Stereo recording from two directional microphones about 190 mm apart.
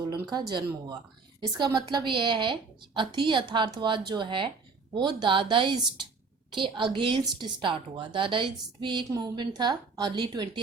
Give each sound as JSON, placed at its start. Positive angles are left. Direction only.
{"t": 0.1, "sound": "a woman's voice", "side_deg": -20}